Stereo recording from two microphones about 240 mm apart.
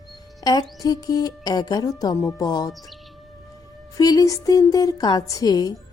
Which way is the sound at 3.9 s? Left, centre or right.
Centre.